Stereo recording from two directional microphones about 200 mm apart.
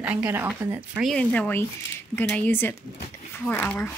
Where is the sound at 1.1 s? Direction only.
5° left (ahead or behind).